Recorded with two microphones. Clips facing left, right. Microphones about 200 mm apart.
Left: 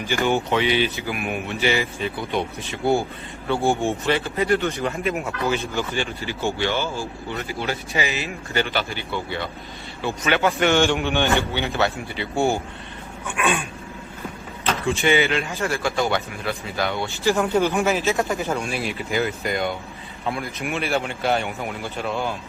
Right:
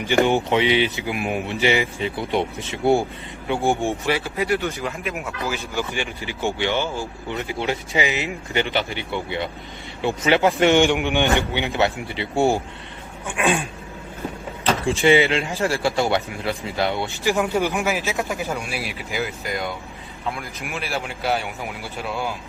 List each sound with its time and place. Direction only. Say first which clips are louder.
0.0 s speech: right 3 dB; 20° right (ahead or behind); by 5.1 s 5° right (ahead or behind)
5.5 s speech: left 2 dB; 15° right (ahead or behind); by 13.7 s 30° right (ahead or behind)
14.8 s speech: right 3 dB; 25° right (ahead or behind); by 21.5 s 5° right (ahead or behind)